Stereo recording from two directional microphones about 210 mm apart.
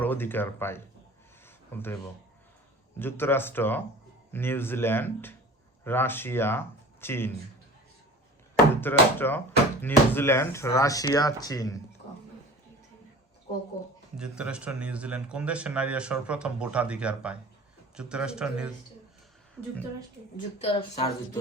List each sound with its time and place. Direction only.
0.0 s speech: 10° left (ahead or behind)
1.5 s a sound: 10° left (ahead or behind)
3.0 s speech: 10° left (ahead or behind)
8.7 s speech: 10° left (ahead or behind)
14.2 s speech: 5° right (ahead or behind)
20.3 s speech: 30° left (ahead or behind)